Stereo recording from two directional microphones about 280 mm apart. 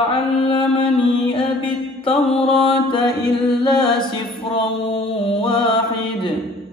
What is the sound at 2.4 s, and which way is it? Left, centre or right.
Mantra, centre.